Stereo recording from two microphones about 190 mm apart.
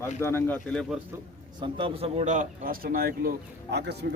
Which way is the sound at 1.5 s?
25° right (ahead or behind).